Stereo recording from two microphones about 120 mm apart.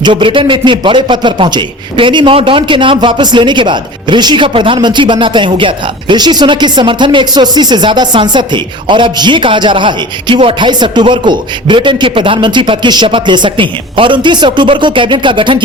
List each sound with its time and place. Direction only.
0.0 s a man's voice: 45° right (ahead or behind)